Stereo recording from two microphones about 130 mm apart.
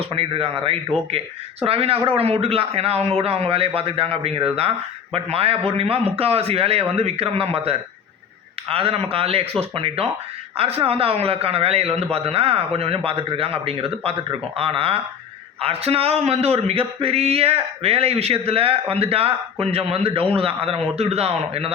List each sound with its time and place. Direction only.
0.0 s a man's voice: 45° right (ahead or behind)